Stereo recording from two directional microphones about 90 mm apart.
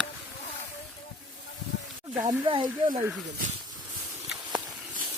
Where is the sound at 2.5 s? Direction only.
60° right (ahead or behind).